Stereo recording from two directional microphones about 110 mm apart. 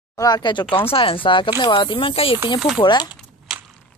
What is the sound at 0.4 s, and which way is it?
Speech, 45° left (ahead or behind).